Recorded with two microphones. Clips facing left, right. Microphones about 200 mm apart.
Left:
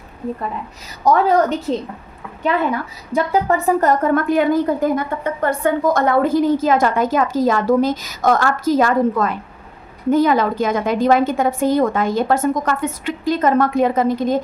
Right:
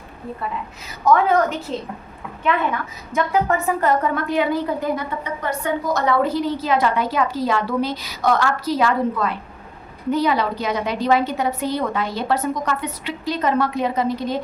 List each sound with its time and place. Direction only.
1.0 s a woman's voice: 35° left (ahead or behind)
3.2 s a woman's voice: 35° left (ahead or behind)